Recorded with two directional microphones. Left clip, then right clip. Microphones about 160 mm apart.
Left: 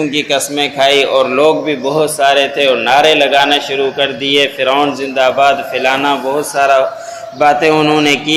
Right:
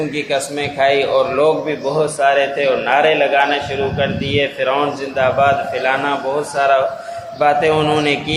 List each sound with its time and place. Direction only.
0.2 s a man's voice: 30° left (ahead or behind)